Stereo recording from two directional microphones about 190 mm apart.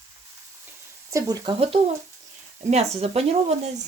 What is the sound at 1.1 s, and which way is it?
Speech, 20° right (ahead or behind).